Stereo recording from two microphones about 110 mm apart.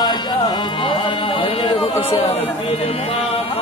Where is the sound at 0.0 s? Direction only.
40° left (ahead or behind); by 2.9 s 65° left (ahead or behind).